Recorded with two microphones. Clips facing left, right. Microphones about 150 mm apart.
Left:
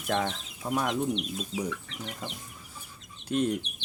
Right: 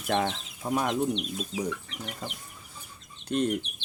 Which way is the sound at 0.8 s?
5° right (ahead or behind).